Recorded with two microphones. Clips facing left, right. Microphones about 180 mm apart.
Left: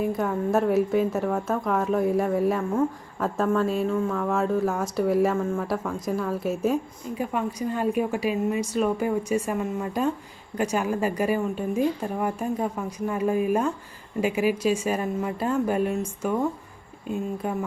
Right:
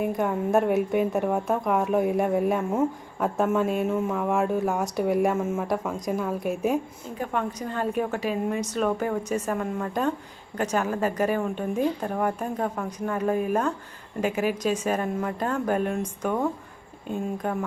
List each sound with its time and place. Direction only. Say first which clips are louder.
0.1 s speech: right 1 dB; centre (ahead or behind)
1.4 s speech: right 1 dB; 15° right (ahead or behind)
2.1 s speech: even; centre (ahead or behind)
3.2 s speech: even; 15° right (ahead or behind)
4.6 s speech: left 1 dB; centre (ahead or behind)